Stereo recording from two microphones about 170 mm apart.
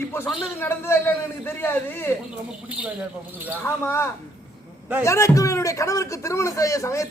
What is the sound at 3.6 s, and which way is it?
Speech, 15° left (ahead or behind).